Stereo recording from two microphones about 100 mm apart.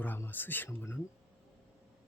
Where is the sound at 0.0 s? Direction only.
20° left (ahead or behind).